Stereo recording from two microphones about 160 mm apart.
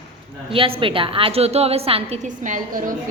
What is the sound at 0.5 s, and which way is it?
A woman's voice, 35° right (ahead or behind).